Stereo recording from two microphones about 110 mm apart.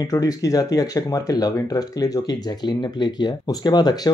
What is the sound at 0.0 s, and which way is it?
Speech, 35° left (ahead or behind).